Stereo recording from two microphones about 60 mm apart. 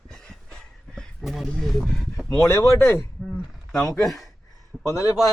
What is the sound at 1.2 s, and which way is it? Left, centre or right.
Speech, centre.